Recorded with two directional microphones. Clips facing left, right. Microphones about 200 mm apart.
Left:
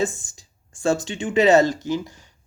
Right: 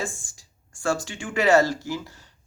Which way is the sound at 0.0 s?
20° left (ahead or behind).